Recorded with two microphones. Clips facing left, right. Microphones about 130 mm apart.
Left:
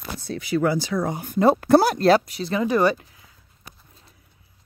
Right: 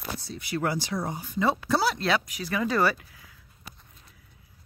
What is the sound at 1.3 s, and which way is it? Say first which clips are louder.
Speech: left 10 dB; 50° left (ahead or behind).